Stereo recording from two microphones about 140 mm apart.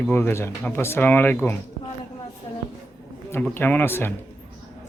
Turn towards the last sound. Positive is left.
turn(degrees=15)  # may be behind; listen again after turning